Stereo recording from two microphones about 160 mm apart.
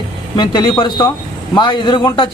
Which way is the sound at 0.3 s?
25° left (ahead or behind).